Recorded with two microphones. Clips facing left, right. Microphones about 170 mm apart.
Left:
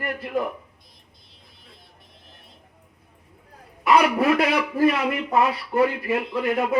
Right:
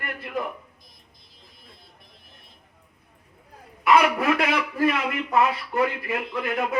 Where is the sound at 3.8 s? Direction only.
35° left (ahead or behind).